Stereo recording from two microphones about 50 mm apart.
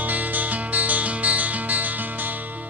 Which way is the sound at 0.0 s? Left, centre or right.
Right.